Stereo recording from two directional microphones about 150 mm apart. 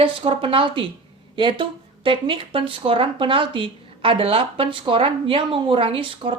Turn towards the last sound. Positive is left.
turn(degrees=-35)  # may be behind; listen again after turning